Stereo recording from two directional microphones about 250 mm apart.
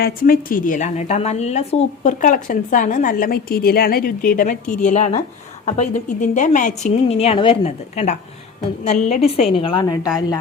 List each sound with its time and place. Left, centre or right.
0.0 s speech: left
4.6 s a woman's voice: centre
4.9 s a woman's voice: left